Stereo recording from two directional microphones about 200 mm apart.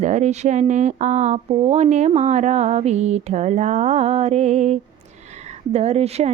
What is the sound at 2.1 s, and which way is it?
Speech, 35° right (ahead or behind).